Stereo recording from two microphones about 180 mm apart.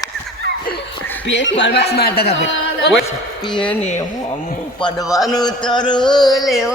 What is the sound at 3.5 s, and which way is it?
Speech, 25° left (ahead or behind).